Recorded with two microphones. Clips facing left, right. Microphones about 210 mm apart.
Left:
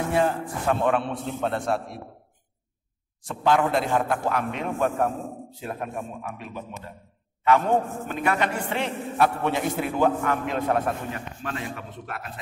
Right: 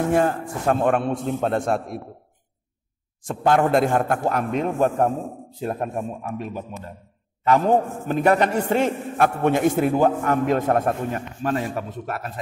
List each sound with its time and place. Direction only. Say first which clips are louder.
0.1 s a man's voice: right 3 dB; 45° right (ahead or behind)
3.2 s a man's voice: right 3 dB; 50° right (ahead or behind)
8.1 s a man's voice: right 7 dB; 40° right (ahead or behind)